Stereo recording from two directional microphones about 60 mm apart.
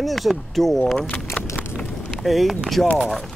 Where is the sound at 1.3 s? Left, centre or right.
Left.